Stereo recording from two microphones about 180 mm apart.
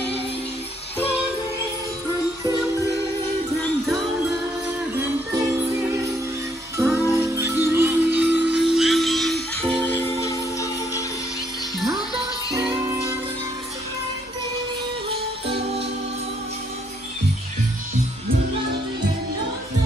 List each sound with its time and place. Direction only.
6.8 s music: 15° right (ahead or behind)
9.6 s music: 15° left (ahead or behind)